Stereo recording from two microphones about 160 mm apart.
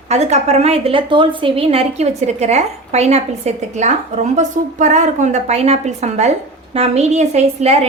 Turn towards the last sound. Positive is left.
turn(degrees=-40)  # may be behind; listen again after turning